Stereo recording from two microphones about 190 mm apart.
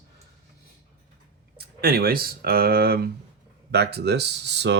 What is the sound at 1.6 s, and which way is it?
Speech, 55° right (ahead or behind).